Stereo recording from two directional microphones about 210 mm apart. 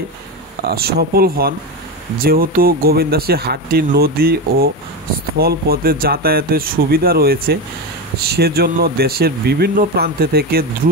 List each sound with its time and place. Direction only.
0.7 s speech: 50° right (ahead or behind)